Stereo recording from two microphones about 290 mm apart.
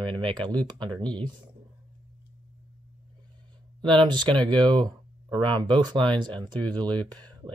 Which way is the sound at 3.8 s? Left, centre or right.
Centre.